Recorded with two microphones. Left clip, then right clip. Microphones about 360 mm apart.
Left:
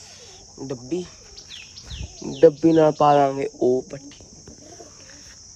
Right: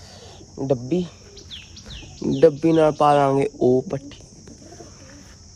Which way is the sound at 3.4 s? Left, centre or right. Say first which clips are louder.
Right 3 dB; centre.